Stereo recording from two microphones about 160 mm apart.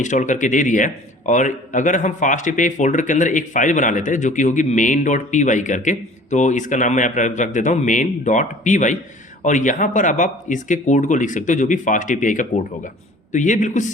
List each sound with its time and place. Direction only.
0.0 s a man's voice: 50° left (ahead or behind)